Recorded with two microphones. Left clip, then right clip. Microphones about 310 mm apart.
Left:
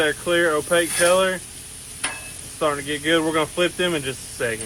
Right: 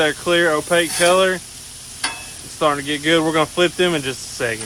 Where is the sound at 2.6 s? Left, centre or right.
Right.